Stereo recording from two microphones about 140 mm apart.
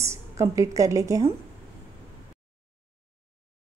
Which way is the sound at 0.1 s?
20° right (ahead or behind).